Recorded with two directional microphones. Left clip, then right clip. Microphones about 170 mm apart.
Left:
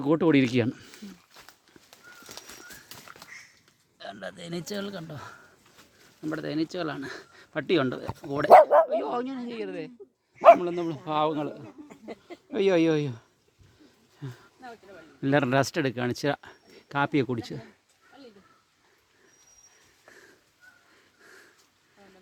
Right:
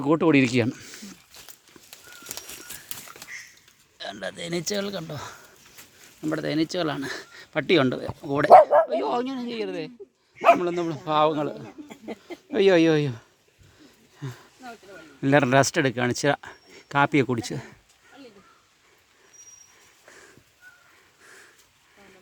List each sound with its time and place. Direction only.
0.0 s speech: 20° left (ahead or behind); by 1.4 s 5° left (ahead or behind)
3.9 s speech: 10° right (ahead or behind); by 11.5 s 5° left (ahead or behind)
11.9 s a sound: 65° right (ahead or behind)
12.5 s speech: centre (ahead or behind)
14.2 s a sound: centre (ahead or behind)
15.2 s speech: 5° left (ahead or behind)